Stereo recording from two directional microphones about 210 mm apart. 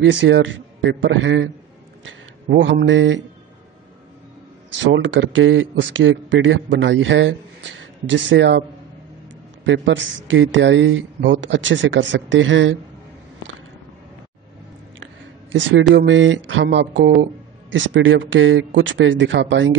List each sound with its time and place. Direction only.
0.0 s a man's voice: 60° right (ahead or behind)
4.9 s a man's voice: 60° right (ahead or behind)
9.7 s a man's voice: 60° right (ahead or behind)
15.9 s a man's voice: 60° right (ahead or behind)